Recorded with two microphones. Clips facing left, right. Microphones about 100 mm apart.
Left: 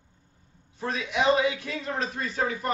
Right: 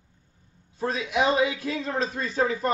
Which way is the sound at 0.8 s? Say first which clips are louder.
Right 2 dB; 30° right (ahead or behind).